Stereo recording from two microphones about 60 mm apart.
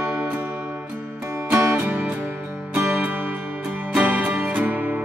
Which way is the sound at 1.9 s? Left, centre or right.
Right.